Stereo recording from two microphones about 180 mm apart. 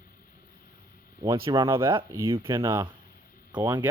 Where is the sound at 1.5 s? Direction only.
30° right (ahead or behind).